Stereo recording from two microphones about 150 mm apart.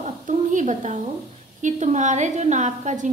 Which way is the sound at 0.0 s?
55° right (ahead or behind).